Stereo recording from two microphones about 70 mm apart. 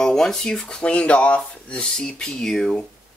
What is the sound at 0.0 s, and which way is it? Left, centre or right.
Speech, centre.